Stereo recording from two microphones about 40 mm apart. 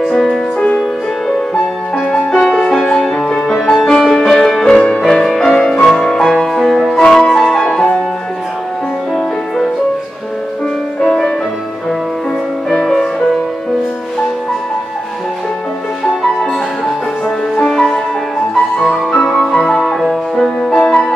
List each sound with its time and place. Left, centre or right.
0.0 s music: centre
2.1 s music: centre
6.5 s music: centre
7.1 s music: centre
11.0 s music: centre
12.8 s music: centre
17.6 s music: centre
20.8 s music: left